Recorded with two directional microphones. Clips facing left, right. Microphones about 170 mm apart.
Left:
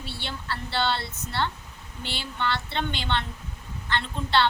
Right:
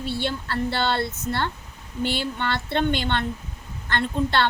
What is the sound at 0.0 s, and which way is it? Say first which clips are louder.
A woman's voice: right 9 dB; 45° right (ahead or behind).